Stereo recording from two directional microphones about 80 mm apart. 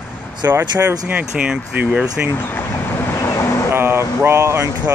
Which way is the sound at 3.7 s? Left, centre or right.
Right.